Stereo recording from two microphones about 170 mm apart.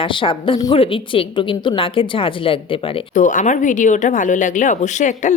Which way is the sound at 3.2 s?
45° left (ahead or behind).